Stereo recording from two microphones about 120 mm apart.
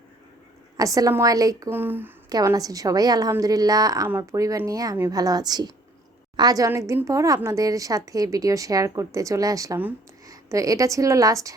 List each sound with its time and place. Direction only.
0.8 s a woman's voice: 30° right (ahead or behind)
1.7 s a sound: 15° right (ahead or behind)
2.3 s a woman's voice: 30° right (ahead or behind)